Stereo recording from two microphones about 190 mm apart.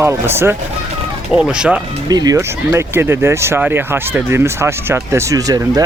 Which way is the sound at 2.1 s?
20° right (ahead or behind).